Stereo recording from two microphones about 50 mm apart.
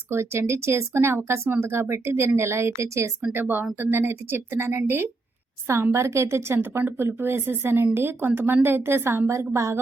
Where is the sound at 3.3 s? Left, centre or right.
Right.